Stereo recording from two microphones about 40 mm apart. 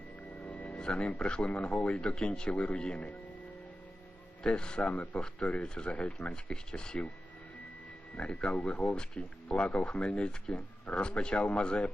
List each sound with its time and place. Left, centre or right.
0.3 s music: left
0.7 s music: centre
0.9 s speech: left
4.4 s speech: left
4.9 s speech: left
5.6 s speech: left
8.2 s speech: left
8.5 s speech: left
9.6 s speech: left